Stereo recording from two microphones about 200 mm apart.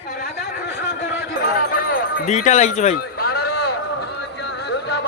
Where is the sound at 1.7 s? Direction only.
45° left (ahead or behind).